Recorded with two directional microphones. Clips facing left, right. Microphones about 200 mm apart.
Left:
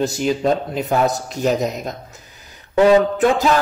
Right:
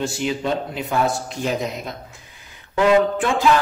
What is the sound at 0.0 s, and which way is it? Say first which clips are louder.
A man's voice: left 5 dB; 40° left (ahead or behind).